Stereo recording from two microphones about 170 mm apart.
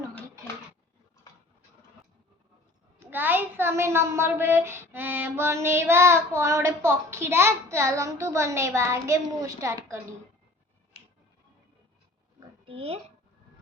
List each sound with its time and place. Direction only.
0.1 s a sound: 10° left (ahead or behind)
3.1 s a woman's voice: 10° right (ahead or behind)
12.6 s speech: 35° right (ahead or behind)